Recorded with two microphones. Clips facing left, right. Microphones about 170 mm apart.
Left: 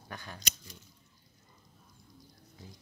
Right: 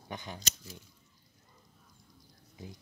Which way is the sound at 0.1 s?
20° right (ahead or behind).